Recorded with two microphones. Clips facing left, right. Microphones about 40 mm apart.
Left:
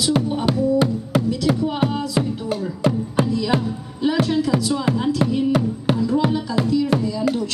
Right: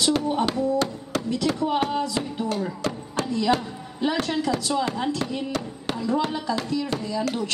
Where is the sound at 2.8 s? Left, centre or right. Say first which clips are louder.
Left 7 dB; centre.